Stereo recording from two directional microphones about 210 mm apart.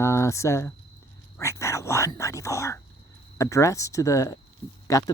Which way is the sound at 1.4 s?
15° left (ahead or behind).